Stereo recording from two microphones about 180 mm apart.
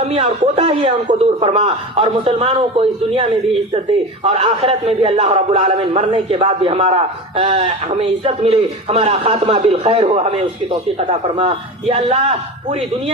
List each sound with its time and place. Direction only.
0.0 s a man's voice: 35° right (ahead or behind)